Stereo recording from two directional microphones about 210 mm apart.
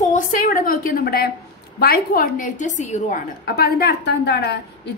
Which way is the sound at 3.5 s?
50° left (ahead or behind).